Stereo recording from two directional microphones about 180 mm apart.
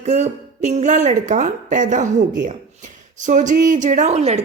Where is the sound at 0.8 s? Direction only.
40° right (ahead or behind).